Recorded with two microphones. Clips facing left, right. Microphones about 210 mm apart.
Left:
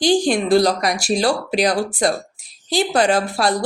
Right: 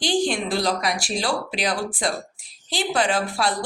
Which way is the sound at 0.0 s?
40° left (ahead or behind).